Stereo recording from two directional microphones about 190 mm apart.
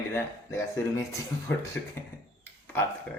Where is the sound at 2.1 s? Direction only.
15° left (ahead or behind).